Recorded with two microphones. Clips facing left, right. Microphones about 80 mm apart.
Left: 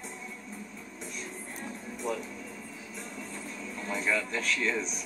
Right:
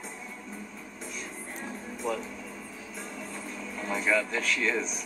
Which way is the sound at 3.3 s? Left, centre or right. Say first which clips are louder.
Right 2 dB; right.